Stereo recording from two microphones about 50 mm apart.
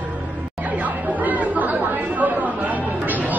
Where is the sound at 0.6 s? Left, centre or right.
Right.